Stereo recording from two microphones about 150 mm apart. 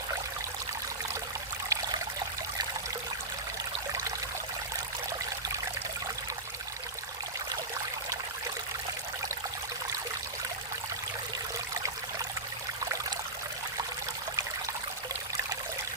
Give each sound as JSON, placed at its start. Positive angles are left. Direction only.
{"t": 1.7, "sound": "stream", "side_deg": -20}
{"t": 12.8, "sound": "stream", "side_deg": -20}